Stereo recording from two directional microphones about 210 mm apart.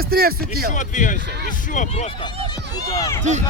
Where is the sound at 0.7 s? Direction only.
35° left (ahead or behind).